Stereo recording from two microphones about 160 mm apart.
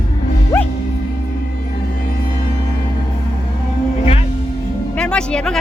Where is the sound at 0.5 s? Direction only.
15° left (ahead or behind).